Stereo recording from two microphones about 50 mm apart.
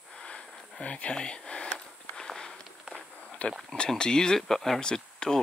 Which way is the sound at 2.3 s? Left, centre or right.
Centre.